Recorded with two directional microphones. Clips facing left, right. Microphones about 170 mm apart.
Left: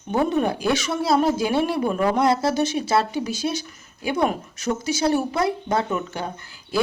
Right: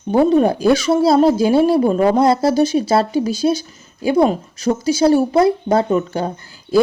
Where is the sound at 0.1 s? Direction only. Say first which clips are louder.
Right 8 dB; 35° right (ahead or behind).